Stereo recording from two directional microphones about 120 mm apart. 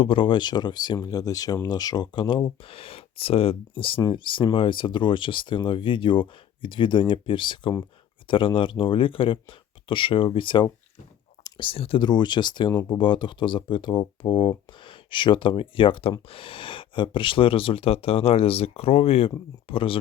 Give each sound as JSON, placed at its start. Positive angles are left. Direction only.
{"t": 0.0, "sound": "speech", "side_deg": 45}